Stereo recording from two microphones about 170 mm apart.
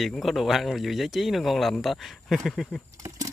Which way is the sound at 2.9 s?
20° right (ahead or behind).